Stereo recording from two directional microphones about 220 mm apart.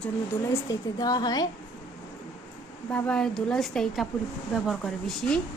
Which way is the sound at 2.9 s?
5° left (ahead or behind).